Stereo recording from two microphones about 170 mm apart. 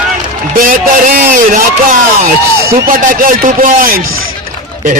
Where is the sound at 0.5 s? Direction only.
55° right (ahead or behind).